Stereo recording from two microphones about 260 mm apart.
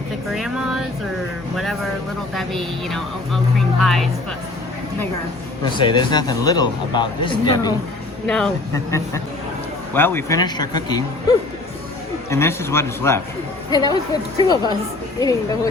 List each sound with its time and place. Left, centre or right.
0.3 s a sound: centre
2.3 s speech: centre
5.6 s speech: centre
12.3 s speech: centre
14.5 s speech: centre
15.2 s speech: centre